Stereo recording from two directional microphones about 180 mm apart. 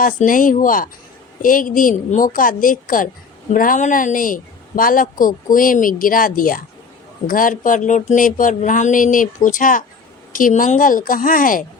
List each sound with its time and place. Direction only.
0.0 s speech: 50° left (ahead or behind)